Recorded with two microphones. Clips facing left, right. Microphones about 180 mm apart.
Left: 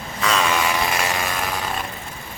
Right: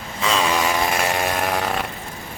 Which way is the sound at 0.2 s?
30° right (ahead or behind).